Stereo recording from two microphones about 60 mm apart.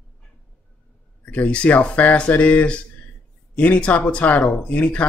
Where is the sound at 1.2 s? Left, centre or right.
Left.